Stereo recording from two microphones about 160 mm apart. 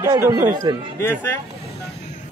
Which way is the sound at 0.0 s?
25° right (ahead or behind).